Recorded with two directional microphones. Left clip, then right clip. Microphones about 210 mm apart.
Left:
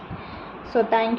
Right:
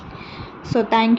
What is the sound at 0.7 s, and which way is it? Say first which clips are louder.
Speech: right 2 dB; 55° right (ahead or behind).